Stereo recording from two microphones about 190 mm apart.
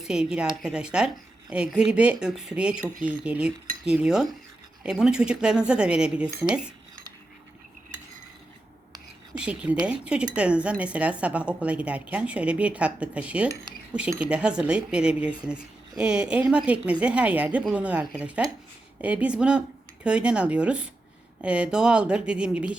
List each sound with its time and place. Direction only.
0.0 s speech: 5° right (ahead or behind)
6.2 s speech: 20° right (ahead or behind)
9.4 s speech: 5° right (ahead or behind)